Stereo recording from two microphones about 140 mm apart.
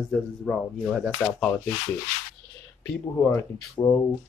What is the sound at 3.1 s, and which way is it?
Speech, 15° left (ahead or behind).